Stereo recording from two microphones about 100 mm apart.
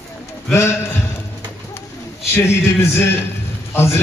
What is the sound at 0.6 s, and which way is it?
Speech, 25° left (ahead or behind).